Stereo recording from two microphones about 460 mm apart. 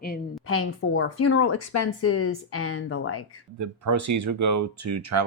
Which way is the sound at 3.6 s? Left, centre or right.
Right.